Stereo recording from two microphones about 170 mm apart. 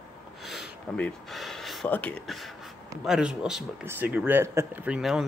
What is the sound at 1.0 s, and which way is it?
Speech, centre (ahead or behind).